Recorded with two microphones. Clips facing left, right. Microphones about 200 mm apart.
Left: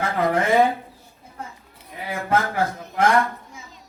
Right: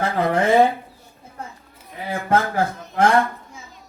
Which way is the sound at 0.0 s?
30° right (ahead or behind).